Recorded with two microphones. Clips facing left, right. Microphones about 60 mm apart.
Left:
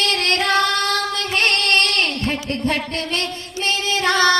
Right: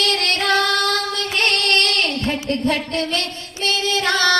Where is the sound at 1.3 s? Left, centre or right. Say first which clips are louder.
Left 1 dB; left.